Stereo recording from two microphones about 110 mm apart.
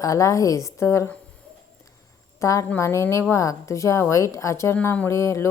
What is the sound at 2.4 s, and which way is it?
A woman's voice, 30° left (ahead or behind).